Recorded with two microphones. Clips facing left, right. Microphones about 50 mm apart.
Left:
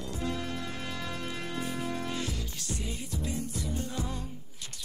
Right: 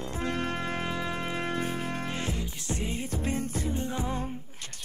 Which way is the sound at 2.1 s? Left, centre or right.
Right.